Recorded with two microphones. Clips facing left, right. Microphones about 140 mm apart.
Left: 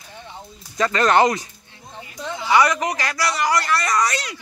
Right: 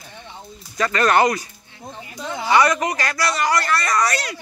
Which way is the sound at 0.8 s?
20° left (ahead or behind).